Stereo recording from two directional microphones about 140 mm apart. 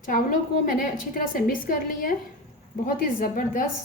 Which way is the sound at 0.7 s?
90° left.